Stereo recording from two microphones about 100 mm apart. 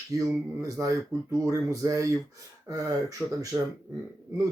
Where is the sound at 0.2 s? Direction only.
35° right (ahead or behind).